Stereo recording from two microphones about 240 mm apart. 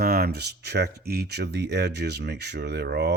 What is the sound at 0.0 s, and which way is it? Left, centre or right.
Speech, right.